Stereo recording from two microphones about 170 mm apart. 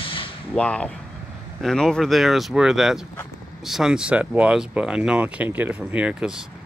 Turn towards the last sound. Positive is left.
turn(degrees=-5)  # may be behind; listen again after turning